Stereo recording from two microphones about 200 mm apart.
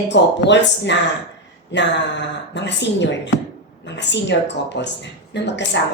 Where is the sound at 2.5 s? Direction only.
60° left (ahead or behind).